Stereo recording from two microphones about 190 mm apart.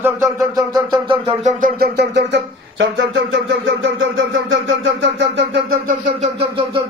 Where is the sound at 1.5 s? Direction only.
45° right (ahead or behind); by 5.7 s 70° right (ahead or behind).